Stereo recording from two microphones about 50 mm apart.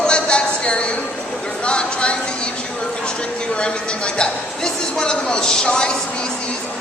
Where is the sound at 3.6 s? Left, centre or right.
Centre.